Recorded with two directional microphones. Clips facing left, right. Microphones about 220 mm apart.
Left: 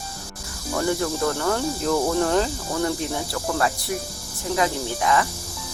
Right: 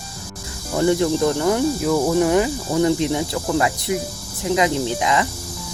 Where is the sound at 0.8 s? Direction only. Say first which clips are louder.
Right 6 dB; 20° right (ahead or behind).